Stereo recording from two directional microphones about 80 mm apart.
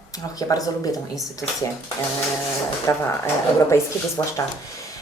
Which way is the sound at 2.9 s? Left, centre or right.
Left.